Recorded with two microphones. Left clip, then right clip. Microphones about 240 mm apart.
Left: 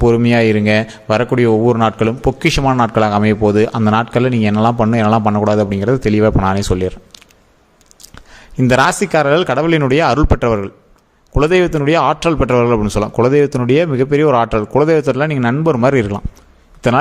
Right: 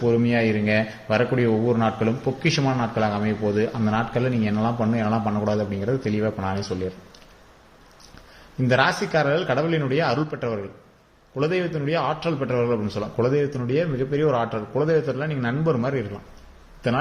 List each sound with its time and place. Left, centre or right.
0.0 s a man's voice: left
8.5 s a man's voice: left